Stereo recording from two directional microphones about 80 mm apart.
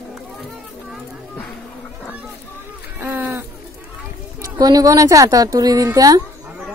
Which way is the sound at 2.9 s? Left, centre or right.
Right.